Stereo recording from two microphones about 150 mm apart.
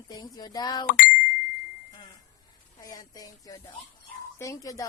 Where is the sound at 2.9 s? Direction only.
25° left (ahead or behind).